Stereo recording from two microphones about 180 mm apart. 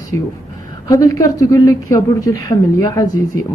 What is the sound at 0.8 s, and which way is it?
Speech, 20° left (ahead or behind).